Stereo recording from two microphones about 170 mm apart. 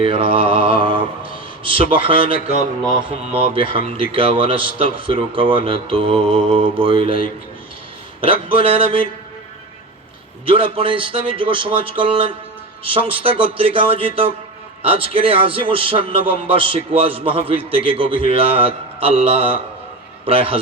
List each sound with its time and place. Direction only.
0.0 s speech: 30° right (ahead or behind)
8.2 s speech: 30° right (ahead or behind)
10.4 s speech: 30° right (ahead or behind)